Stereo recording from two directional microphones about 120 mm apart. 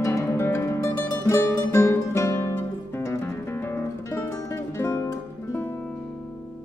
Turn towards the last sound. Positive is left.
turn(degrees=20)  # may be behind; listen again after turning